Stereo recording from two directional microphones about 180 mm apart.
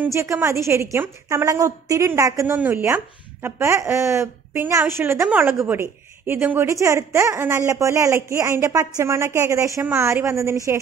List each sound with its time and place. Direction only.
0.0 s a woman's voice: 15° right (ahead or behind)